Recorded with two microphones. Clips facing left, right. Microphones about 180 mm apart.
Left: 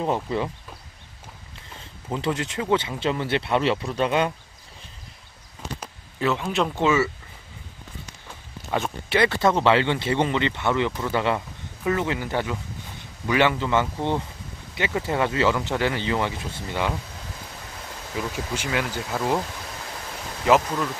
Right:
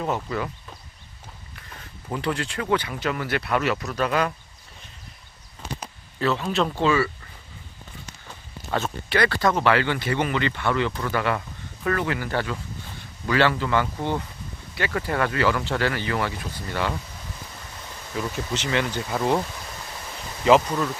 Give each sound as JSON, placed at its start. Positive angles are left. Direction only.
{"t": 0.0, "sound": "speech", "side_deg": 25}
{"t": 1.5, "sound": "speech", "side_deg": 20}
{"t": 6.1, "sound": "a man's voice", "side_deg": 15}
{"t": 8.3, "sound": "speech", "side_deg": 15}
{"t": 18.1, "sound": "speech", "side_deg": 10}
{"t": 20.4, "sound": "speech", "side_deg": 0}